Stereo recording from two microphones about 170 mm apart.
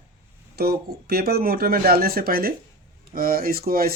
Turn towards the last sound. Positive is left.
turn(degrees=-60)  # may be behind; listen again after turning